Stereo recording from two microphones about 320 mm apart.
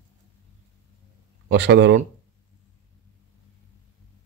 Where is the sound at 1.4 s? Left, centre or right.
Right.